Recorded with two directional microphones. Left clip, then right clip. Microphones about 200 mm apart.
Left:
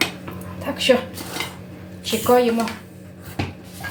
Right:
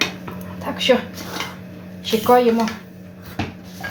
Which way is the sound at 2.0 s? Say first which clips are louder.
Right 2 dB; 10° right (ahead or behind).